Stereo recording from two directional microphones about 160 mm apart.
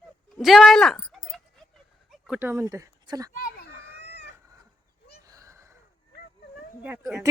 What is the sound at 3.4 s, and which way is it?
Children playing, 90° left.